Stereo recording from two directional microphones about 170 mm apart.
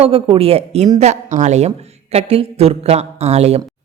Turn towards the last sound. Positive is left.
turn(degrees=-40)  # may be behind; listen again after turning